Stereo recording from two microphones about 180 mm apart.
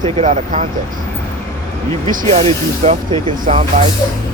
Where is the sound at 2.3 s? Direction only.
35° right (ahead or behind).